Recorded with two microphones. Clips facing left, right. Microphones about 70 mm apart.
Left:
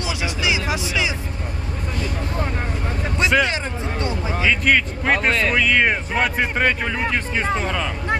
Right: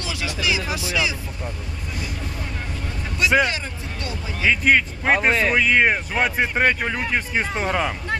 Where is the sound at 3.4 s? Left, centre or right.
Left.